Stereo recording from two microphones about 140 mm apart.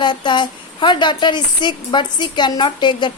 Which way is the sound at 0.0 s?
35° left (ahead or behind).